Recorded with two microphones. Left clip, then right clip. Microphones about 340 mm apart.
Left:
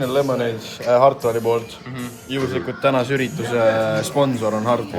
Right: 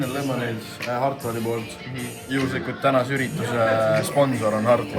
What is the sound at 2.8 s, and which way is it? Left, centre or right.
Speech, centre.